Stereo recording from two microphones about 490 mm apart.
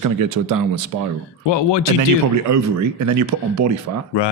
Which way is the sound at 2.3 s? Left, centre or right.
Right.